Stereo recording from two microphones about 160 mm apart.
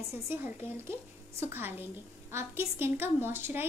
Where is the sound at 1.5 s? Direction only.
15° right (ahead or behind).